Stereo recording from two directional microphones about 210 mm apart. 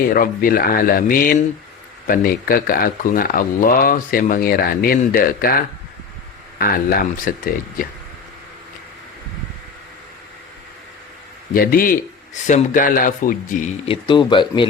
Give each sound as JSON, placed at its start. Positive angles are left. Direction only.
{"t": 0.1, "sound": "speech", "side_deg": 40}
{"t": 11.5, "sound": "a man's voice", "side_deg": 45}